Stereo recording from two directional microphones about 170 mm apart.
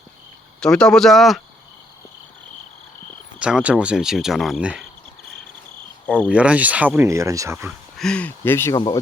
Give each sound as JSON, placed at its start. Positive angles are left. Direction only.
{"t": 0.6, "sound": "speech", "side_deg": 5}
{"t": 3.3, "sound": "speech", "side_deg": -5}
{"t": 6.2, "sound": "speech", "side_deg": -5}
{"t": 7.9, "sound": "speech", "side_deg": 5}
{"t": 8.7, "sound": "speech", "side_deg": 25}